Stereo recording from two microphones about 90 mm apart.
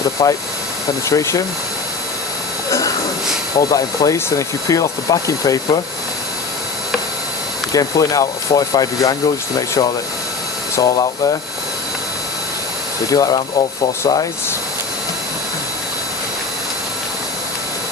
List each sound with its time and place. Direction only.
0.2 s speech: 45° left (ahead or behind)
2.6 s hiss: 40° left (ahead or behind)
3.6 s speech: 40° left (ahead or behind)
7.7 s speech: 40° left (ahead or behind)
13.1 s speech: 45° left (ahead or behind)